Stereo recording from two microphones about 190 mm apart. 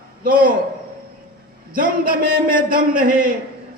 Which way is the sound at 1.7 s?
50° right (ahead or behind).